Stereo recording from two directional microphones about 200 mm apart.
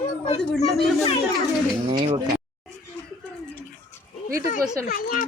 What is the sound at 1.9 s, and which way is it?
Speech, 25° right (ahead or behind).